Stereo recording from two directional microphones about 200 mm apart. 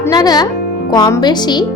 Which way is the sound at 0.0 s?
20° left (ahead or behind).